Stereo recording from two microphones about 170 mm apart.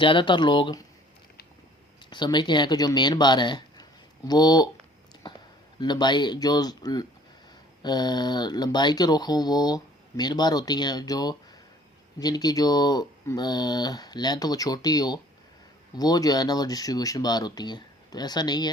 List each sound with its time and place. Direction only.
0.0 s speech: 30° left (ahead or behind)
2.0 s speech: 25° left (ahead or behind)
5.8 s speech: 25° left (ahead or behind)